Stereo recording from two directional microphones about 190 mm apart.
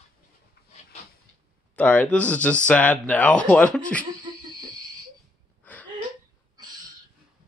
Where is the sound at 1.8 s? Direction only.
5° left (ahead or behind).